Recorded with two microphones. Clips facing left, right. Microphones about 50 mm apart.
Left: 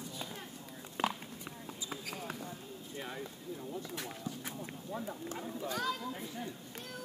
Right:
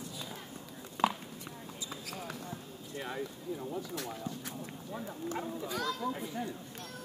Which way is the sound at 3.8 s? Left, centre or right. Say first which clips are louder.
Right 3 dB; centre.